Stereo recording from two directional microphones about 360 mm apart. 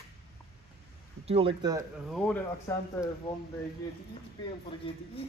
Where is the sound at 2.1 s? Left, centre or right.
Centre.